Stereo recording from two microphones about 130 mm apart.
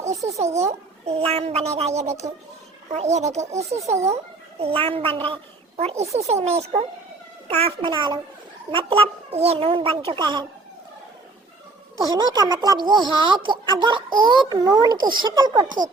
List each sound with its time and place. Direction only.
0.0 s a child's voice: 60° right (ahead or behind)
3.8 s speech: 25° right (ahead or behind)
4.6 s a child's voice: 45° right (ahead or behind)
7.9 s speech: 35° right (ahead or behind)
8.7 s a child's voice: 45° right (ahead or behind)
12.0 s speech: 30° right (ahead or behind)